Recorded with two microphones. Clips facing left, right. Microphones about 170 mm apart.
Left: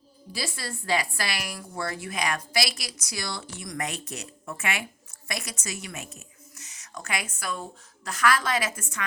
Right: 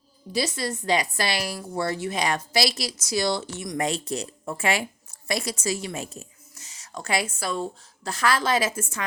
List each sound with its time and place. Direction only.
0.3 s a woman's voice: 20° right (ahead or behind)